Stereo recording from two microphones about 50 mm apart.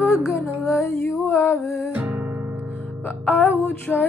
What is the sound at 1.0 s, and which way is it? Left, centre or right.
Music, left.